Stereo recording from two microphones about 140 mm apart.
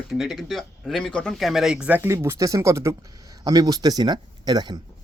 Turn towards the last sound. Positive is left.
turn(degrees=-30)  # may be behind; listen again after turning